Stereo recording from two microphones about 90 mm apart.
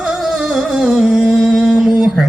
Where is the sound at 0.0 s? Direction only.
5° right (ahead or behind).